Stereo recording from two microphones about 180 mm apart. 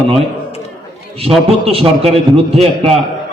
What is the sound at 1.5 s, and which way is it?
A man's voice, 30° right (ahead or behind).